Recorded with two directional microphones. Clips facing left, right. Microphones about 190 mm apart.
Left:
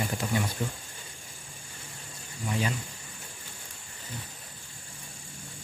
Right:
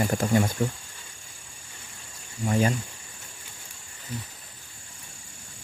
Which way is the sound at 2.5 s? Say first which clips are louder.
Right 7 dB; 45° right (ahead or behind).